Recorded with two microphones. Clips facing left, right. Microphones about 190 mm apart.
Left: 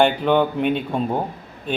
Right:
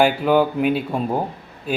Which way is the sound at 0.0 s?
5° right (ahead or behind).